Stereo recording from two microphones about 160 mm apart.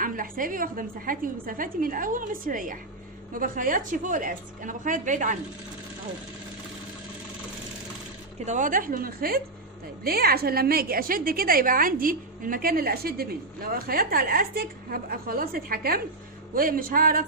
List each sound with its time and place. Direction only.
0.0 s a woman's voice: 60° right (ahead or behind)
8.5 s a woman's voice: 55° right (ahead or behind)